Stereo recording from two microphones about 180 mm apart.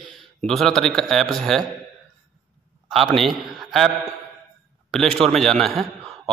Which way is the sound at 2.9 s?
Centre (ahead or behind).